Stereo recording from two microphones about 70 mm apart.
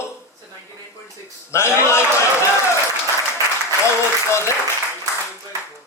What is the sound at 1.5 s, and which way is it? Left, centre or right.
Speech, left.